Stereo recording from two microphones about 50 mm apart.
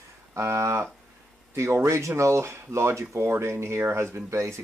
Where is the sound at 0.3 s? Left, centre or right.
Right.